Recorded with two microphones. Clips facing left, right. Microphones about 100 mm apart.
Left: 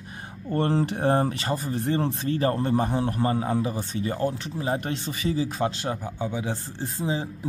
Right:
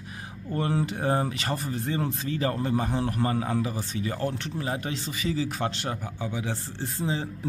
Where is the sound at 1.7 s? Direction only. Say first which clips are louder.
Left 4 dB; 30° left (ahead or behind).